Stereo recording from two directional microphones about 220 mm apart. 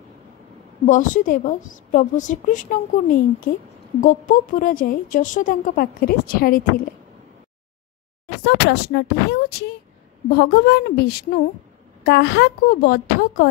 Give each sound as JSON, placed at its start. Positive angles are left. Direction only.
{"t": 0.8, "sound": "a woman's voice", "side_deg": 35}
{"t": 8.5, "sound": "a woman's voice", "side_deg": 50}